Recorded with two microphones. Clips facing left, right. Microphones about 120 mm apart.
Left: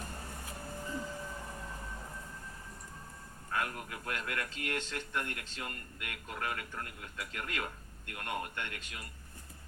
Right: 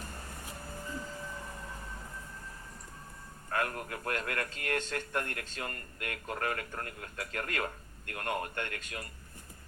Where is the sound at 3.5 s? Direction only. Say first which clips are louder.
Right 3 dB; 45° right (ahead or behind).